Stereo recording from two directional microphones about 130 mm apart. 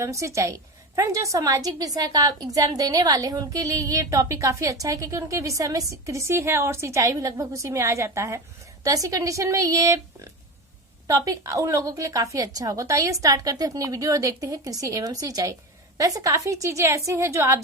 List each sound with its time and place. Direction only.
0.0 s a woman's voice: 25° right (ahead or behind)